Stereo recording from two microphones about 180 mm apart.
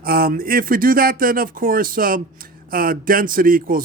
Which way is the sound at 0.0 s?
55° right (ahead or behind).